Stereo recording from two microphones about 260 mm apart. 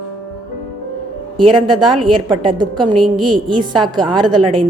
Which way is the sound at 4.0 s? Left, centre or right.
Centre.